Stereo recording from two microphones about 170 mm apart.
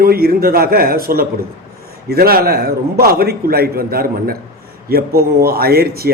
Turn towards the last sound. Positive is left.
turn(degrees=-65)  # may be behind; listen again after turning